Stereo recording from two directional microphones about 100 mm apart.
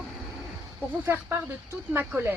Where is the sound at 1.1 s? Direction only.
20° right (ahead or behind).